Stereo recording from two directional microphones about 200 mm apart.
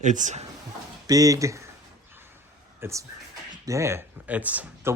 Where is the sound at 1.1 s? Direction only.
15° right (ahead or behind).